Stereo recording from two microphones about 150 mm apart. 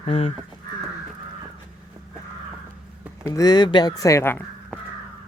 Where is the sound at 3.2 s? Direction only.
25° left (ahead or behind).